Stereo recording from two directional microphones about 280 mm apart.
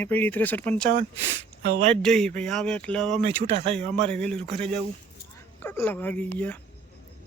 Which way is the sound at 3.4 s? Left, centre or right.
Right.